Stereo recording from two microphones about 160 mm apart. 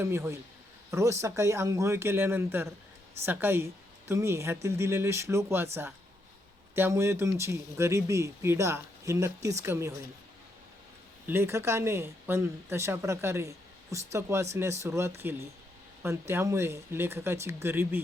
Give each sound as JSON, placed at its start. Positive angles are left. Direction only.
{"t": 0.0, "sound": "speech", "side_deg": -15}
{"t": 6.7, "sound": "speech", "side_deg": -15}
{"t": 11.3, "sound": "speech", "side_deg": -15}